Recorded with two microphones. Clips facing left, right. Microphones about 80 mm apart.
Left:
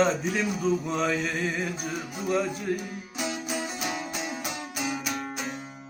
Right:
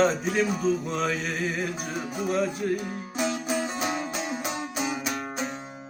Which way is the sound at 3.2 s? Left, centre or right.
Right.